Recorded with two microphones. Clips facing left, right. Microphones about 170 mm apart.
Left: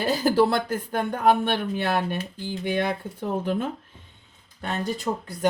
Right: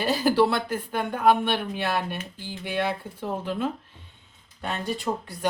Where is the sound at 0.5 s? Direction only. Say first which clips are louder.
Left 2 dB; 45° left (ahead or behind).